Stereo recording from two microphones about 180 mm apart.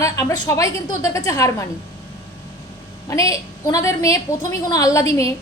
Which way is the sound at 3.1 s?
15° left (ahead or behind).